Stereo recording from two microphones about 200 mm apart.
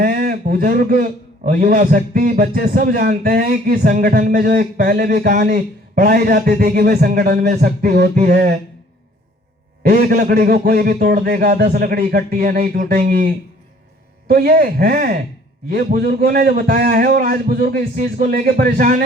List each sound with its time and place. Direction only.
0.0 s a man's voice: 45° right (ahead or behind)
9.8 s a man's voice: 50° right (ahead or behind)